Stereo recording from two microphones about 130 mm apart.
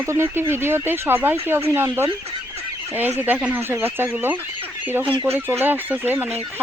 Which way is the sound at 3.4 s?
15° right (ahead or behind).